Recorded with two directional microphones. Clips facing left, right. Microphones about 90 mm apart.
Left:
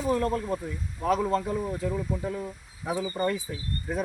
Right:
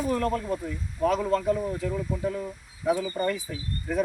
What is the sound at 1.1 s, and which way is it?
Speech, 15° left (ahead or behind).